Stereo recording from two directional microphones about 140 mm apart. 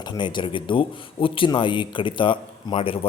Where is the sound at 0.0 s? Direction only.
30° left (ahead or behind).